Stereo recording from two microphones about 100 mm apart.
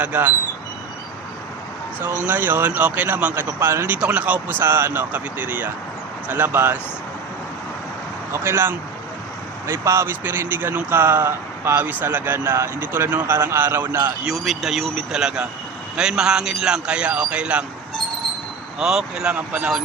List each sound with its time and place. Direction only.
0.0 s speech: 15° right (ahead or behind)
2.0 s speech: 20° right (ahead or behind)
3.6 s speech: 25° right (ahead or behind)
3.9 s speech: 15° right (ahead or behind)
8.3 s speech: 25° right (ahead or behind)
14.3 s speech: centre (ahead or behind)
18.8 s speech: 5° right (ahead or behind)